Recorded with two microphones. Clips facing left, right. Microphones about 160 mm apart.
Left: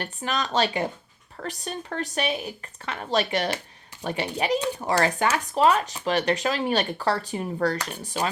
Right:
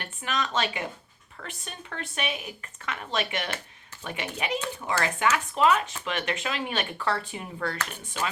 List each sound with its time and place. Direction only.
0.0 s speech: 35° left (ahead or behind)